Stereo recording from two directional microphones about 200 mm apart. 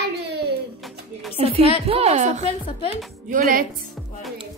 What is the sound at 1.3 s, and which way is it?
A woman's voice, 30° right (ahead or behind).